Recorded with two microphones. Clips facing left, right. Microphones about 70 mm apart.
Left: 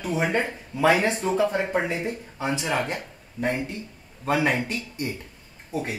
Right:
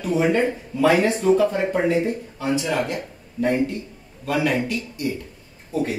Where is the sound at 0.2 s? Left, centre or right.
Left.